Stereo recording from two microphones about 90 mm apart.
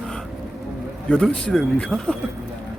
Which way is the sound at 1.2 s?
10° left (ahead or behind).